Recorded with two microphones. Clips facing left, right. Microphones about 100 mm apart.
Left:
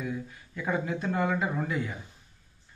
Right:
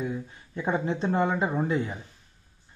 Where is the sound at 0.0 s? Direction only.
25° right (ahead or behind).